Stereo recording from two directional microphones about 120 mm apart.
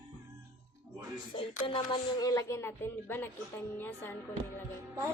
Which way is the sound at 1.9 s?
35° left (ahead or behind).